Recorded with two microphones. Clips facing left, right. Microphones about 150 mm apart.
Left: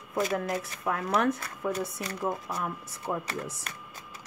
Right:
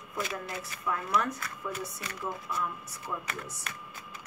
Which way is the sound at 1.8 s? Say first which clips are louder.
Left 6 dB; 35° left (ahead or behind).